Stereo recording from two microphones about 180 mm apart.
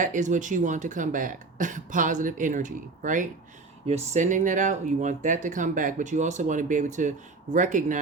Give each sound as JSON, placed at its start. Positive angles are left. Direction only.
{"t": 0.0, "sound": "speech", "side_deg": -45}